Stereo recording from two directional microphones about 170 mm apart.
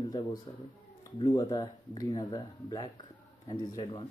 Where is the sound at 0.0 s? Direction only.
25° left (ahead or behind).